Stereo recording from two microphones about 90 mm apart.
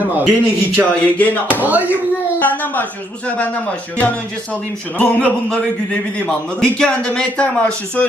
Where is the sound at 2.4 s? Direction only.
20° left (ahead or behind).